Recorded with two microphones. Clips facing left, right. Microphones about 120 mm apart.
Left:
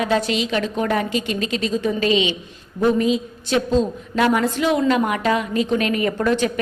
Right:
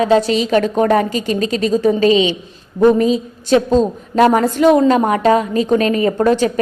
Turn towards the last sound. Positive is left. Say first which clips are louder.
# right 6 dB
turn(degrees=-35)  # may be behind; listen again after turning